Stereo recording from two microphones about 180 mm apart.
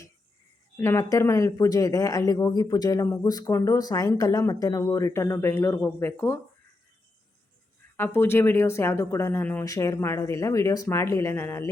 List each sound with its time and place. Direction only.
0.8 s speech: 15° left (ahead or behind)
7.9 s speech: 10° left (ahead or behind)